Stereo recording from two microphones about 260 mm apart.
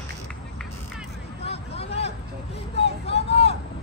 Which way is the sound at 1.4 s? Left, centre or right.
Left.